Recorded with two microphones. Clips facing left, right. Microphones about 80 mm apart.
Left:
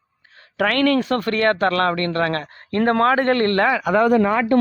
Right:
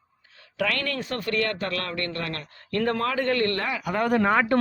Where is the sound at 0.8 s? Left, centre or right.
Left.